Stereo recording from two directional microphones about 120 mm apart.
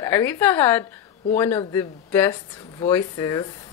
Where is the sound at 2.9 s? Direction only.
25° left (ahead or behind).